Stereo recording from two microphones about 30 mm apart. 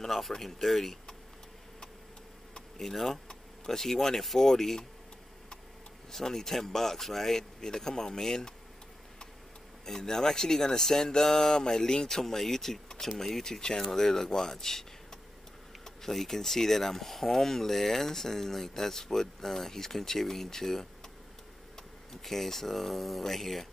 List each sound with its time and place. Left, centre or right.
0.0 s speech: centre
2.8 s speech: centre
6.1 s speech: centre
9.8 s speech: centre
13.5 s speech: left
22.1 s speech: centre